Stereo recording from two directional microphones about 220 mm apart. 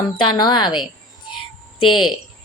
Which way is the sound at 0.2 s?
20° left (ahead or behind).